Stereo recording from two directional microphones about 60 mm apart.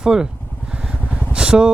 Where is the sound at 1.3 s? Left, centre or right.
Centre.